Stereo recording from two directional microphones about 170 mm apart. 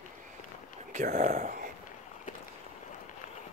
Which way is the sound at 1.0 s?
60° right (ahead or behind).